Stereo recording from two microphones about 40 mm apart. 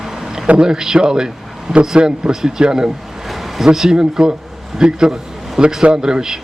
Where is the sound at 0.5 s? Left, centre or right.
Centre.